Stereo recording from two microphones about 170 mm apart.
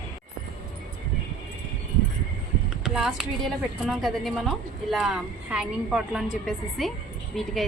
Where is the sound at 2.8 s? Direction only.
5° right (ahead or behind).